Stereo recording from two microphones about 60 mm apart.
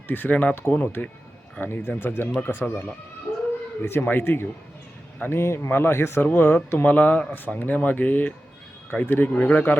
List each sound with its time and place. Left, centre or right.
0.1 s speech: left
2.2 s speech: left
2.5 s speech: left
4.0 s a man's voice: left
6.8 s speech: left